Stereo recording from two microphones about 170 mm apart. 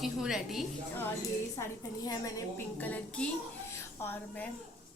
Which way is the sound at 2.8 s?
10° left (ahead or behind).